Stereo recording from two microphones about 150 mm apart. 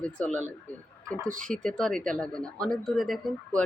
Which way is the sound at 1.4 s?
5° left (ahead or behind).